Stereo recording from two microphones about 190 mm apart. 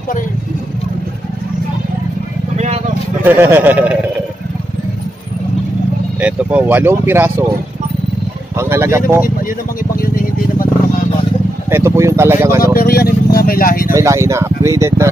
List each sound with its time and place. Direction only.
2.5 s vehicle: 35° right (ahead or behind)
3.3 s speech: 10° right (ahead or behind)
6.2 s speech: 10° right (ahead or behind)
8.5 s speech: 15° right (ahead or behind)
11.7 s speech: 15° right (ahead or behind)
12.7 s speech: 55° left (ahead or behind)
13.9 s speech: 15° right (ahead or behind)